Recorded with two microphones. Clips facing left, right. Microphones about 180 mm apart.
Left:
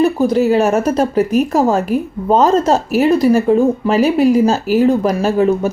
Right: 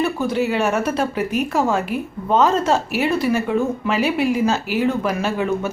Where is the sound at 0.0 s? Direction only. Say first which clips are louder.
Left 7 dB; 40° left (ahead or behind).